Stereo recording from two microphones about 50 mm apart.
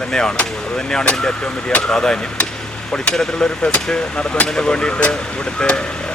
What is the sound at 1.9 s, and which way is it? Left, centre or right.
Speech, centre.